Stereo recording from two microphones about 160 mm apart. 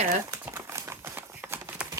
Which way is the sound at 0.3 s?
15° right (ahead or behind).